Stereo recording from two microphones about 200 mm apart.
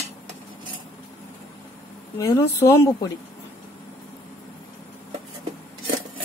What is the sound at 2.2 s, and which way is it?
Speech, 15° left (ahead or behind).